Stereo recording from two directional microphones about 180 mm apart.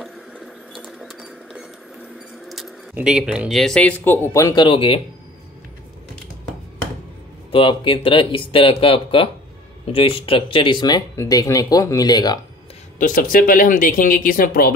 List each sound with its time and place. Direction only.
0.0 s a sound: centre (ahead or behind)
2.4 s keys jangling: centre (ahead or behind)
2.9 s speech: 5° right (ahead or behind); by 5.0 s 30° left (ahead or behind)
7.5 s speech: 30° left (ahead or behind)
13.0 s speech: 50° left (ahead or behind)